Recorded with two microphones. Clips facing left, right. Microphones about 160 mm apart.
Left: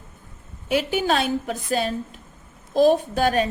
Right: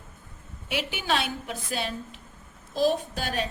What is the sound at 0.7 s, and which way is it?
A woman's voice, 40° left (ahead or behind).